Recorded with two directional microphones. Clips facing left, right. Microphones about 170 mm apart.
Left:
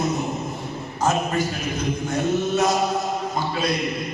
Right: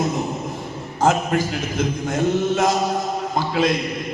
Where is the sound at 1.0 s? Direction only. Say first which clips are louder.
Right 3 dB; 80° right.